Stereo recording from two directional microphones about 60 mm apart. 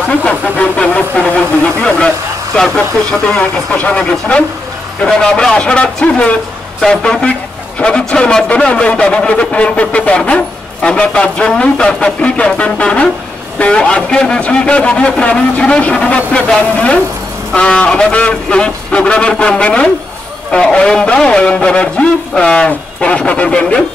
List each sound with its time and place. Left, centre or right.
0.2 s a man's voice: left